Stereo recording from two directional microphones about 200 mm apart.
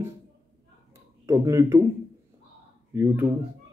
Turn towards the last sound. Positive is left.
turn(degrees=-10)  # may be behind; listen again after turning